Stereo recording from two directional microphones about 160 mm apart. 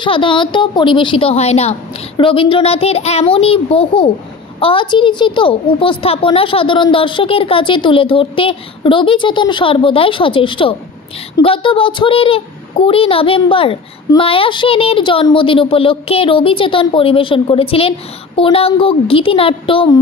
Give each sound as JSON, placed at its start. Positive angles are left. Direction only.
{"t": 0.0, "sound": "speech", "side_deg": 30}